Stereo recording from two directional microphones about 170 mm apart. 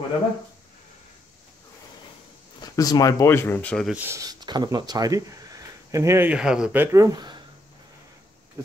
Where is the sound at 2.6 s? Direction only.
25° left (ahead or behind); by 3.9 s 5° left (ahead or behind).